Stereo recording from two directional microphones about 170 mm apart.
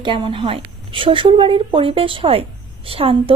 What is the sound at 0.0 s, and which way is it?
A woman's voice, 30° right (ahead or behind).